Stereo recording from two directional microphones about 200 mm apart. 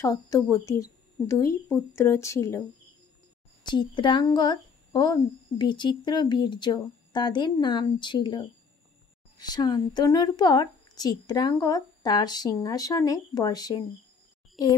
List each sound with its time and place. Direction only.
0.0 s speech: 15° left (ahead or behind)
3.6 s speech: 25° left (ahead or behind)